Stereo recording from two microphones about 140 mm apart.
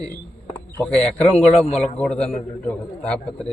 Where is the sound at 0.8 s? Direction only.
10° left (ahead or behind).